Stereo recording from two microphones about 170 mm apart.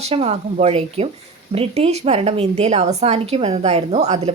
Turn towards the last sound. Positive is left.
turn(degrees=-40)  # may be behind; listen again after turning